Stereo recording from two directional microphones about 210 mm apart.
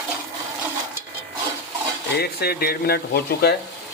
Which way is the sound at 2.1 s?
50° left (ahead or behind).